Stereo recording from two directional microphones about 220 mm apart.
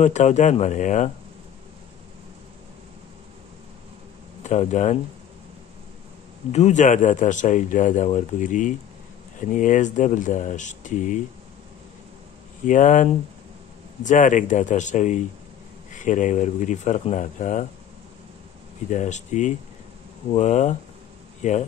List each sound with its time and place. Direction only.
0.0 s a man's voice: 30° left (ahead or behind)
4.4 s speech: 30° left (ahead or behind)
6.5 s a man's voice: 30° left (ahead or behind)
12.6 s a man's voice: 35° left (ahead or behind)
18.9 s a man's voice: 35° left (ahead or behind)